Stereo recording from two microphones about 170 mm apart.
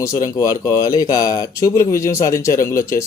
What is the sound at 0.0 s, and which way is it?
Speech, 20° left (ahead or behind).